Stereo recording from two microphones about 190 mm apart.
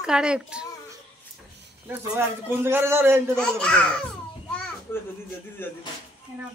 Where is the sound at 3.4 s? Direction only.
5° left (ahead or behind).